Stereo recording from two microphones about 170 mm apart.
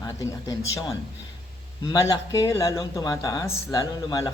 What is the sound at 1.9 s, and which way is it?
Speech, 20° left (ahead or behind).